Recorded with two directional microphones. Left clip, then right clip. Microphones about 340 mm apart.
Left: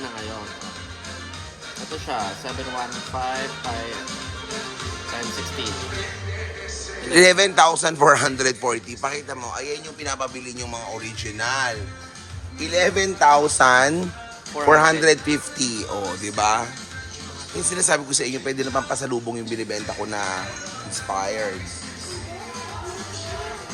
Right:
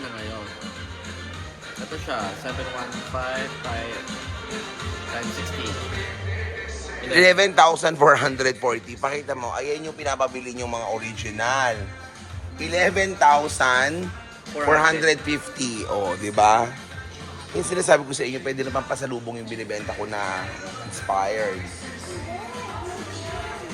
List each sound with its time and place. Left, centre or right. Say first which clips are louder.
7.1 s a man's voice: left 1 dB; centre